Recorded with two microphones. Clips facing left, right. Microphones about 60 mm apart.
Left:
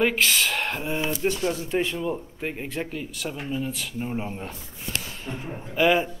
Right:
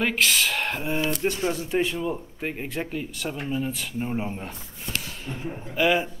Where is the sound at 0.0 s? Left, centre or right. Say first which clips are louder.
Left 1 dB; centre.